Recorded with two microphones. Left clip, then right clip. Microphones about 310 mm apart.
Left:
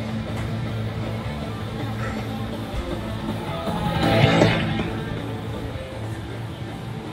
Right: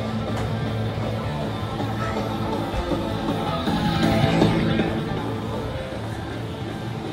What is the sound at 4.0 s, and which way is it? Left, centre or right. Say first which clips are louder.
Music: left 4 dB; left.